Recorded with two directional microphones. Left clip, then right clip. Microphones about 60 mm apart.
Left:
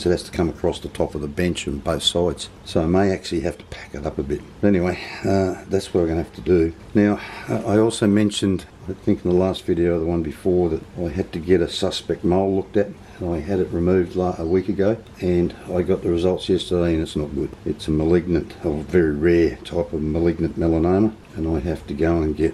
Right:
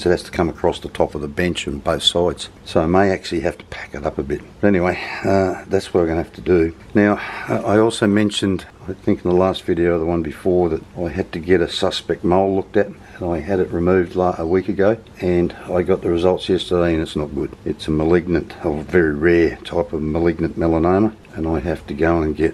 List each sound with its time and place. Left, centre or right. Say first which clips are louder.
0.0 s speech: right 3 dB; right